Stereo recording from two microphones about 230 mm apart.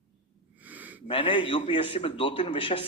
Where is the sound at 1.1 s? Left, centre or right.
Left.